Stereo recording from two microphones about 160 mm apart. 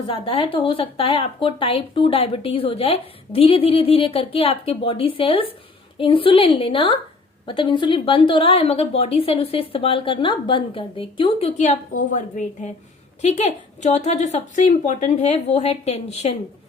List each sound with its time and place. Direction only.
0.1 s speech: 35° left (ahead or behind)